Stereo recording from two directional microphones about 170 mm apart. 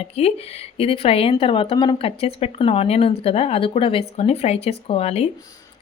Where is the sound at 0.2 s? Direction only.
35° left (ahead or behind).